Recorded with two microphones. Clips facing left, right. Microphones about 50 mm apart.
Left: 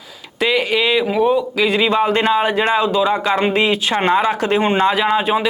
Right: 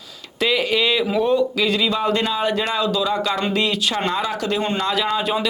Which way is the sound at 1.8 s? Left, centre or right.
Left.